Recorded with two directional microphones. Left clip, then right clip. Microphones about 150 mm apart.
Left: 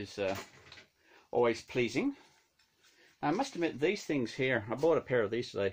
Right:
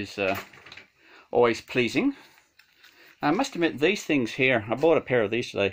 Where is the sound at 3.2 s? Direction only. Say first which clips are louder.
Right 8 dB; 20° right (ahead or behind).